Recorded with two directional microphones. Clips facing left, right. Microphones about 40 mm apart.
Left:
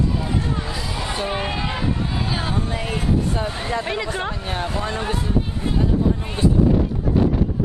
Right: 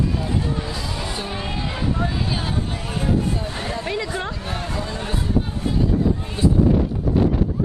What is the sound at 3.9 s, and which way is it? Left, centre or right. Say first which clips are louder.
Speech: left 1 dB; centre.